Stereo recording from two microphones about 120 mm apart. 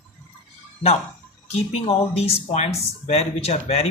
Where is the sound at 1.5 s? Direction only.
60° left (ahead or behind).